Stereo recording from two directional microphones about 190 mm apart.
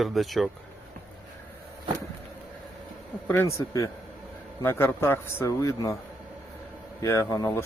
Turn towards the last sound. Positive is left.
turn(degrees=15)  # may be behind; listen again after turning